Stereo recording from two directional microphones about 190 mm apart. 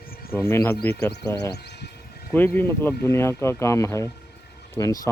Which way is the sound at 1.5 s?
60° left (ahead or behind).